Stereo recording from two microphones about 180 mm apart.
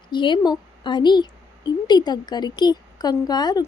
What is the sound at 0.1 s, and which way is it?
A woman's voice, 25° left (ahead or behind).